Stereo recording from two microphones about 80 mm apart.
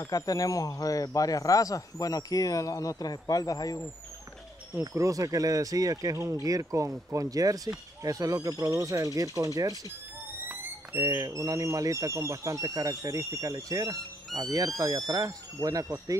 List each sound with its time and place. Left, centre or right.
0.0 s speech: left
4.9 s speech: right
11.2 s speech: right